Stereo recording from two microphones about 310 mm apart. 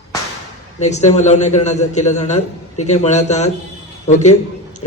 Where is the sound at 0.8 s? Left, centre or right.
Left.